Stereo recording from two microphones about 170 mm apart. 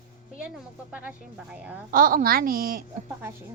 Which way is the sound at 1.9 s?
55° right (ahead or behind).